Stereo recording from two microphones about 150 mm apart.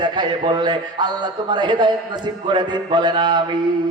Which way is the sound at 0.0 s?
30° right (ahead or behind).